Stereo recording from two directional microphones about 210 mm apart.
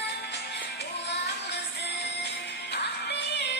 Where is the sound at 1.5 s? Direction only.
55° left (ahead or behind).